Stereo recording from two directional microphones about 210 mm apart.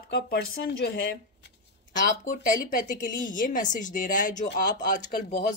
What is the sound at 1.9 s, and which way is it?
Speech, 35° left (ahead or behind).